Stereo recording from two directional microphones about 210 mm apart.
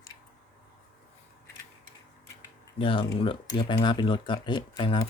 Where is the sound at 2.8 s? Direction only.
25° left (ahead or behind).